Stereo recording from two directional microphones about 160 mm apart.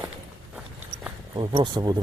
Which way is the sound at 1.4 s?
30° right (ahead or behind).